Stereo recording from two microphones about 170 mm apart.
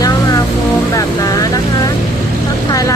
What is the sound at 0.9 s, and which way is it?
Speech, 20° left (ahead or behind).